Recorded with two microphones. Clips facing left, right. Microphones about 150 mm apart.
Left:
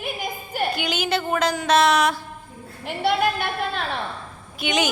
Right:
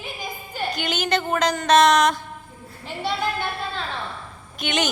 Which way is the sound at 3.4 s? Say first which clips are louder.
Left 2 dB; 65° left (ahead or behind).